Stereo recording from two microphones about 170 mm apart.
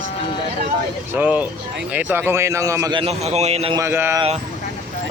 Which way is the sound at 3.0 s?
40° right (ahead or behind).